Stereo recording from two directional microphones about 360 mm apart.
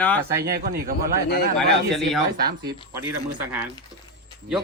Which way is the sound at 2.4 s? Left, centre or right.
Right.